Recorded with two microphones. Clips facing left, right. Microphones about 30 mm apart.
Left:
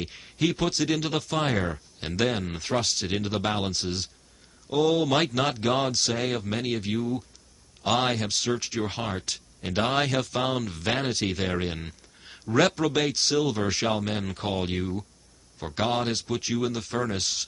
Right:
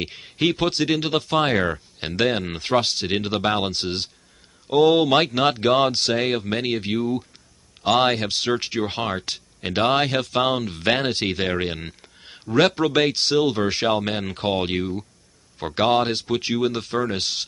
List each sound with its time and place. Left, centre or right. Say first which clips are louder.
0.0 s speech: right 4 dB; right
3.8 s speech: right 4 dB; right
4.7 s speech: right 6 dB; right
11.6 s a sound: right 5 dB; right
12.5 s speech: right 4 dB; right
15.6 s speech: right 7 dB; right